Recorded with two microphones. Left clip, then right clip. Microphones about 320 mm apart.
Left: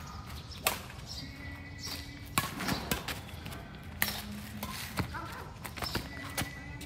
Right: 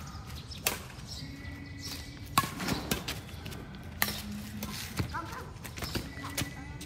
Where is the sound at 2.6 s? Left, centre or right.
Centre.